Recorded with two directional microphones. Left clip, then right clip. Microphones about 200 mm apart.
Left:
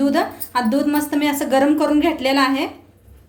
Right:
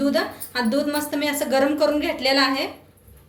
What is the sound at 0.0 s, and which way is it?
A woman's voice, 50° left (ahead or behind).